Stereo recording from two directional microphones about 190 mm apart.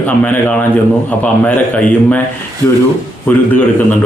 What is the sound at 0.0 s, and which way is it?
A man's voice, 10° left (ahead or behind).